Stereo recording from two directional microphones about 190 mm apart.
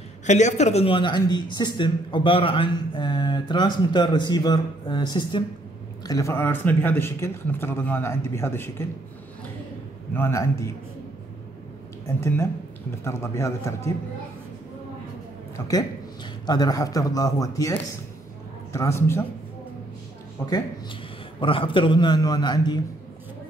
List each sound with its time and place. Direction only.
0.3 s a man's voice: 40° left (ahead or behind); by 8.8 s 15° left (ahead or behind)
10.1 s a man's voice: 15° left (ahead or behind)
12.2 s a man's voice: 15° left (ahead or behind)
16.4 s a man's voice: 20° left (ahead or behind)
20.4 s a man's voice: 15° left (ahead or behind)
21.4 s a man's voice: 25° left (ahead or behind)